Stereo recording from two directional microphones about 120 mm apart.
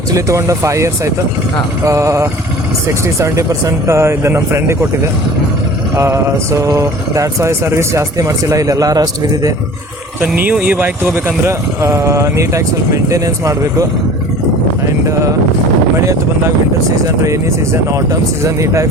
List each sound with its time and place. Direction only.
0.1 s speech: 25° right (ahead or behind)
6.0 s speech: 25° right (ahead or behind)
10.2 s speech: 15° right (ahead or behind); by 13.8 s 30° right (ahead or behind)
17.2 s speech: 25° right (ahead or behind)